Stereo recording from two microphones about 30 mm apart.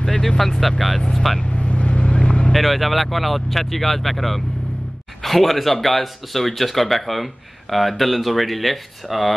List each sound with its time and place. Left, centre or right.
0.4 s speech: centre
1.4 s vehicle: left
2.5 s speech: centre